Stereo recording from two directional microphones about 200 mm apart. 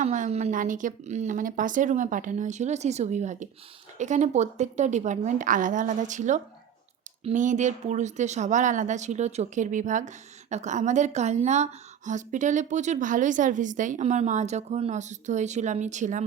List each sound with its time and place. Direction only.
0.0 s speech: 35° right (ahead or behind)